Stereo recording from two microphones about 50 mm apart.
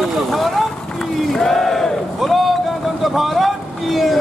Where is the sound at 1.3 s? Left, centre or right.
Centre.